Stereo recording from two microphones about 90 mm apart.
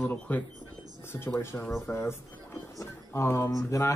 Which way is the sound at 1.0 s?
25° left (ahead or behind).